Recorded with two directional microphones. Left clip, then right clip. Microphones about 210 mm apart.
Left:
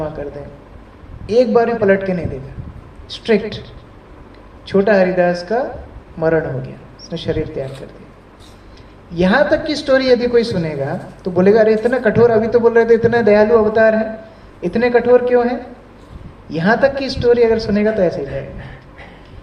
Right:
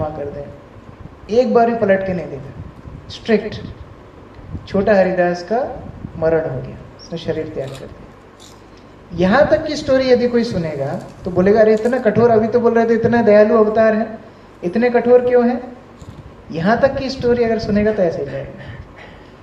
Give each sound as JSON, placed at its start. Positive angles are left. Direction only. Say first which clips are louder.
{"t": 1.3, "sound": "a man's voice", "louder": "even", "side_deg": 55}
{"t": 4.6, "sound": "a man's voice", "louder": "left 1 dB", "side_deg": 55}
{"t": 9.1, "sound": "a man's voice", "louder": "right 1 dB", "side_deg": 55}